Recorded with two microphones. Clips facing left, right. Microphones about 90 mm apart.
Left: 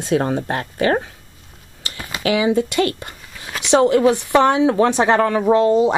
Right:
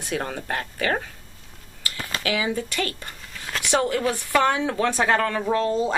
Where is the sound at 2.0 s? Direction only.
15° left (ahead or behind).